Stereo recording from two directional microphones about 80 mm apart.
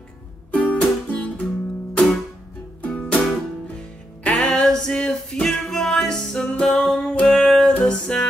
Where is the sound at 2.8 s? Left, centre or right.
Centre.